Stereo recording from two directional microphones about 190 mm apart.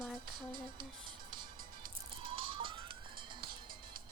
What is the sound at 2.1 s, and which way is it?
Music, 30° right (ahead or behind).